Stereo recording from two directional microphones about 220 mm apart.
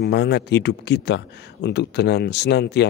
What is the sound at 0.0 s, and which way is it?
Speech, 50° left (ahead or behind).